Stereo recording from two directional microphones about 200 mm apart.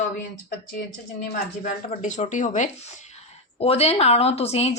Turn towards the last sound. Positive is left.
turn(degrees=30)  # may be behind; listen again after turning